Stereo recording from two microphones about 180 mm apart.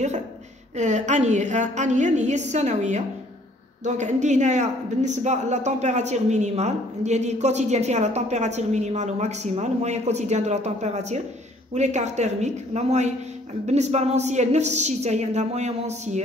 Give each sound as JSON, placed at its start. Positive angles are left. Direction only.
{"t": 0.7, "sound": "a woman's voice", "side_deg": -40}